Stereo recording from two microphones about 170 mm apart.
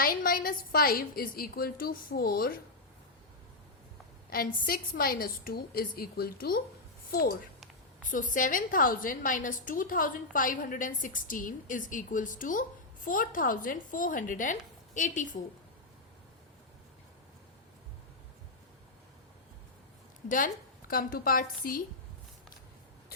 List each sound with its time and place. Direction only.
0.0 s a woman's voice: 55° left (ahead or behind)
4.3 s a woman's voice: 60° left (ahead or behind)
20.2 s a woman's voice: 55° left (ahead or behind)